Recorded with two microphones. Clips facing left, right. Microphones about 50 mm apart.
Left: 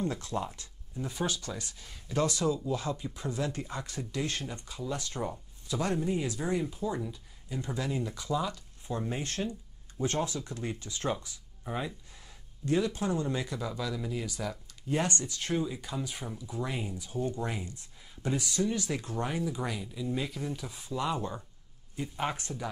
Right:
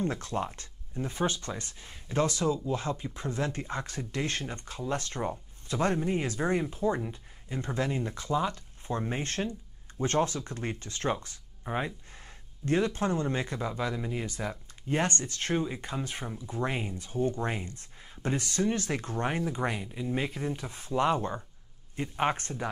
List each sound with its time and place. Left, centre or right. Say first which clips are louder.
0.0 s speech: right 2 dB; right